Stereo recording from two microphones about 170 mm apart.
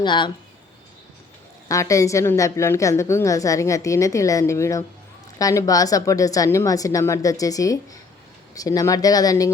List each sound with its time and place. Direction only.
0.0 s a woman's voice: 25° left (ahead or behind)
1.6 s a woman's voice: 20° left (ahead or behind)